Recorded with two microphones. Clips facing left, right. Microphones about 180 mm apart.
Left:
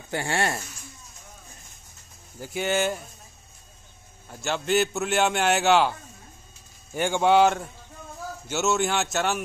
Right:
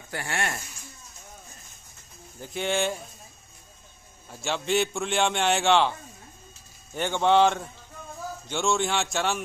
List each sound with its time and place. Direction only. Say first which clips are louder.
0.1 s speech: left 5 dB; 30° left (ahead or behind)
2.4 s a man's voice: left 2 dB; 5° left (ahead or behind)
4.3 s a man's voice: left 2 dB; centre (ahead or behind)